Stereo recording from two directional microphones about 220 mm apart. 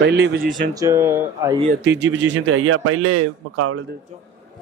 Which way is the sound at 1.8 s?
55° right (ahead or behind).